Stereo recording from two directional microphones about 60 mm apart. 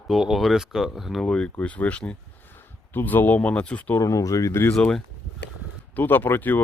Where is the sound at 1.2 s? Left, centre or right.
Centre.